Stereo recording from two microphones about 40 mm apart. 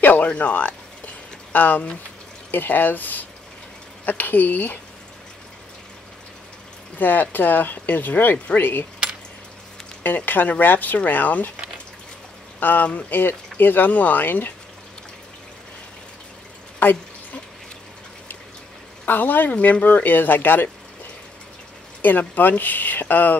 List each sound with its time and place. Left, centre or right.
0.2 s speech: left
2.5 s speech: left
7.0 s speech: left
10.0 s speech: left
12.5 s speech: left
19.0 s speech: left
22.3 s speech: left